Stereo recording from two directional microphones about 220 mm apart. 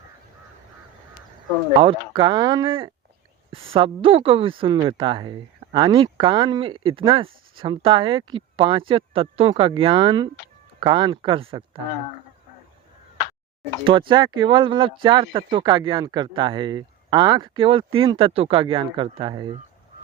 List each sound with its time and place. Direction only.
1.8 s speech: 25° right (ahead or behind)
13.8 s speech: 20° right (ahead or behind)